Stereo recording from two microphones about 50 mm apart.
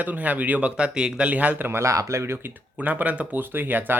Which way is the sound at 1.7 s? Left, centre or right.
Right.